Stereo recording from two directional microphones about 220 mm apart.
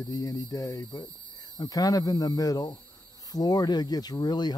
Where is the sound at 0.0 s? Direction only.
15° left (ahead or behind).